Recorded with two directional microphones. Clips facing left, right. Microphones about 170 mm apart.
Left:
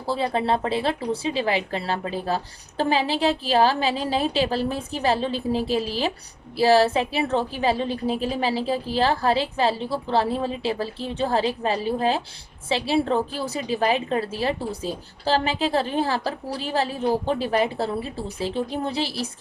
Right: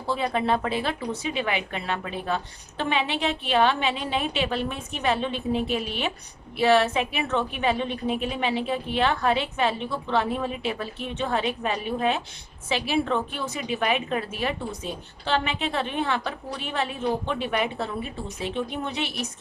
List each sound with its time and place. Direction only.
0.0 s speech: 30° left (ahead or behind)